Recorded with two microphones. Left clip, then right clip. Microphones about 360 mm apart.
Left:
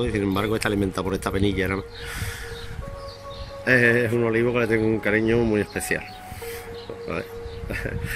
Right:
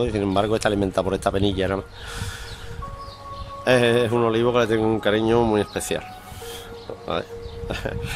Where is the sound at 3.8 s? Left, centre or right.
Right.